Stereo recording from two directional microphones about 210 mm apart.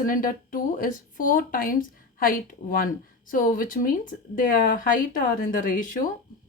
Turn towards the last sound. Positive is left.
turn(degrees=40)  # may be behind; listen again after turning